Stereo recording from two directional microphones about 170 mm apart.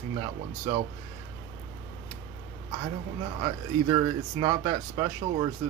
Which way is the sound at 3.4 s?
25° right (ahead or behind).